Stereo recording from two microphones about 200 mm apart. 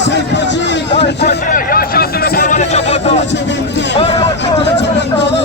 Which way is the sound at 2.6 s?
35° left (ahead or behind).